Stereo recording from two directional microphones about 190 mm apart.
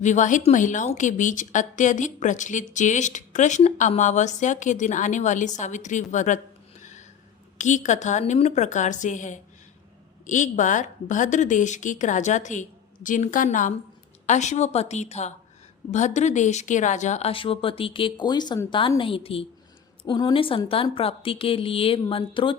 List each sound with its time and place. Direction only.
0.0 s a woman's voice: 40° left (ahead or behind)
7.6 s a woman's voice: 40° left (ahead or behind)